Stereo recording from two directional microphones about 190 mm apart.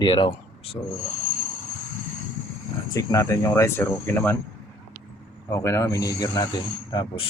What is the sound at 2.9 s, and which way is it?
Speech, 15° left (ahead or behind).